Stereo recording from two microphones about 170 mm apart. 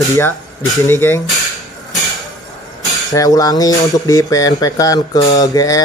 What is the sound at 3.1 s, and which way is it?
Speech, 20° left (ahead or behind).